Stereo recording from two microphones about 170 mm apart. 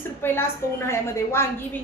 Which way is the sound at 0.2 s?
15° left (ahead or behind).